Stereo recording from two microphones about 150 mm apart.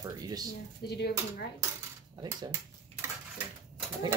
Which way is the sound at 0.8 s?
90° left.